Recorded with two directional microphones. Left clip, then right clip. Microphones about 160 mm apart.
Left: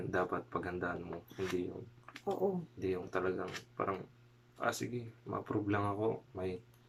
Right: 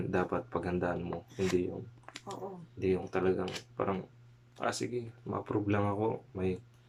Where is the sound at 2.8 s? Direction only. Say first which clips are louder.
Right 5 dB; 10° right (ahead or behind).